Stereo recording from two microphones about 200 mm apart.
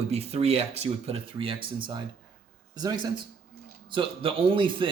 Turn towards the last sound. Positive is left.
turn(degrees=-25)  # may be behind; listen again after turning